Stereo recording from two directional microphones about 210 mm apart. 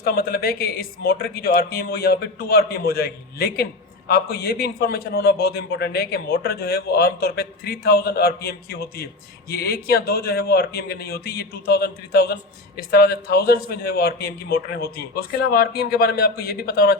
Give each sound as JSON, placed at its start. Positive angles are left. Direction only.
{"t": 0.0, "sound": "a man's voice", "side_deg": 45}